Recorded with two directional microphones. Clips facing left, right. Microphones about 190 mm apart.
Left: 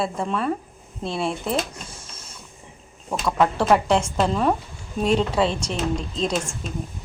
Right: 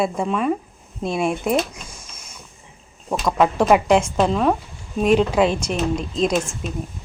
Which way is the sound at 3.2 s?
10° right (ahead or behind).